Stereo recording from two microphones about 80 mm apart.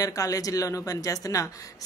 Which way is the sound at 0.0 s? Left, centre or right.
Left.